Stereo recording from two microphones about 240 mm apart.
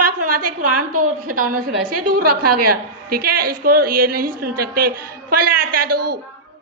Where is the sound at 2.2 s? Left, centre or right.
Right.